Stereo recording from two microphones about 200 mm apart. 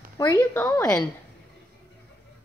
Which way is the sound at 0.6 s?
5° left (ahead or behind).